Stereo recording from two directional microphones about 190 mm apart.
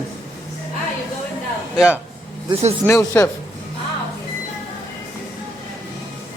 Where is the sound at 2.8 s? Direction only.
15° left (ahead or behind).